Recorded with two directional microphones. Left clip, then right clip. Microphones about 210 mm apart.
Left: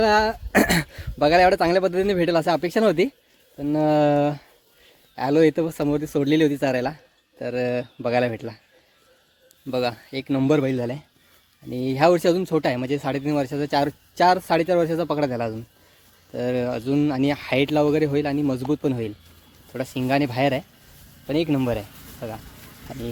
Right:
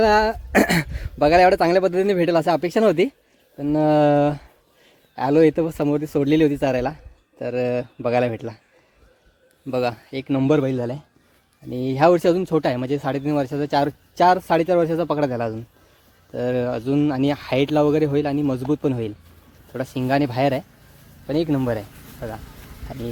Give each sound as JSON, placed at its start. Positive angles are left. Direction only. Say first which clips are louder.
{"t": 0.0, "sound": "speech", "louder": "right 2 dB", "side_deg": 0}
{"t": 9.6, "sound": "speech", "louder": "right 2 dB", "side_deg": 0}